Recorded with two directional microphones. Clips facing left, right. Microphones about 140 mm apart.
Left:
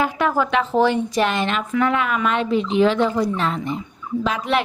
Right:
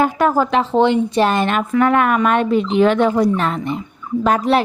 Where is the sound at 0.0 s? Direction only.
45° right (ahead or behind); by 1.3 s 25° right (ahead or behind).